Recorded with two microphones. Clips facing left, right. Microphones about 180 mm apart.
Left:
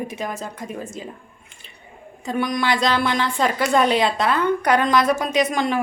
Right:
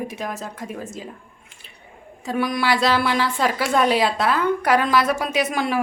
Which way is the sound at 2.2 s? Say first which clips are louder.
Even; 5° right (ahead or behind).